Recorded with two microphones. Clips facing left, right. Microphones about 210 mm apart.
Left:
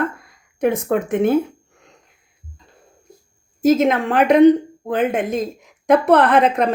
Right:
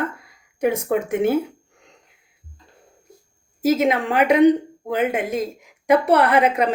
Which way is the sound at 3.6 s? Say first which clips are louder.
Left 3 dB; 10° right (ahead or behind).